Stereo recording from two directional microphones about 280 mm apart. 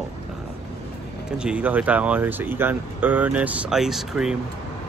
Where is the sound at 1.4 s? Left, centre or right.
Centre.